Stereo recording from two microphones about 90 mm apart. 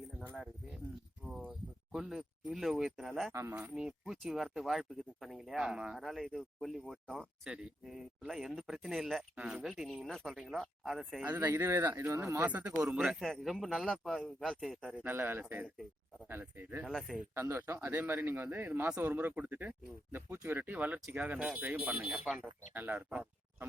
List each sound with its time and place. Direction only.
1.3 s speech: 5° right (ahead or behind)
3.3 s speech: 30° right (ahead or behind)
3.8 s speech: 10° right (ahead or behind)
9.3 s speech: 15° right (ahead or behind)
9.6 s speech: 5° right (ahead or behind)
11.3 s speech: 20° right (ahead or behind)
12.8 s speech: 10° right (ahead or behind)
13.1 s speech: centre (ahead or behind)
15.0 s speech: 25° right (ahead or behind)
16.8 s speech: 5° left (ahead or behind)
17.3 s speech: 25° right (ahead or behind); by 22.4 s 5° right (ahead or behind)
22.7 s speech: 20° right (ahead or behind)